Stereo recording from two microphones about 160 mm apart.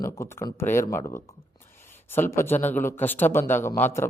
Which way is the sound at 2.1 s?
15° left (ahead or behind).